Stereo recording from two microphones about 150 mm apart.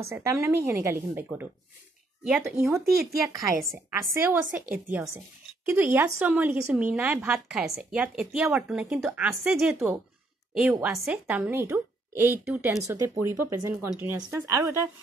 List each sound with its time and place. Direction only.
0.1 s speech: 15° right (ahead or behind)
2.5 s speech: 20° right (ahead or behind)
2.8 s speech: 90° right
4.2 s speech: 10° right (ahead or behind)
12.8 s speech: 20° right (ahead or behind)